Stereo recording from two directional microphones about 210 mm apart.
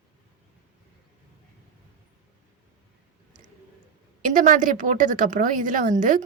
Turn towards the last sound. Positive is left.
turn(degrees=-40)  # may be behind; listen again after turning